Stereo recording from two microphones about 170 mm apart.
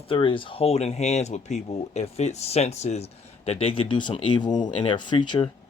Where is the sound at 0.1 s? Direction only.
30° left (ahead or behind).